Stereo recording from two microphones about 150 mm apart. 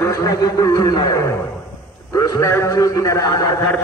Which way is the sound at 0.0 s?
20° left (ahead or behind).